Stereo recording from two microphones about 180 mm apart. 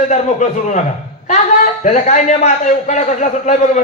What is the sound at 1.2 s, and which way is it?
A man's voice, 40° left (ahead or behind).